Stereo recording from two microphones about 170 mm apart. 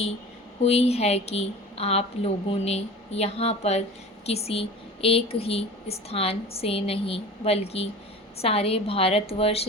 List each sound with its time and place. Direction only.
0.6 s a woman's voice: 35° left (ahead or behind)